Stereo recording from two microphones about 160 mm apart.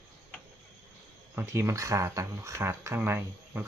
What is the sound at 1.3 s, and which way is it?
Speech, 15° right (ahead or behind).